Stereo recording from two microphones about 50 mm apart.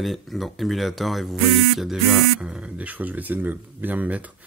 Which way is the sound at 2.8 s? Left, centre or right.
Right.